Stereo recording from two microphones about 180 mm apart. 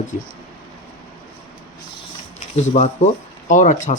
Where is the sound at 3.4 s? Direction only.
45° left (ahead or behind).